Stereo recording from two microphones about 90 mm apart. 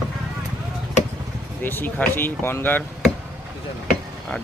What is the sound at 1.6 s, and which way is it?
Speech, 25° left (ahead or behind).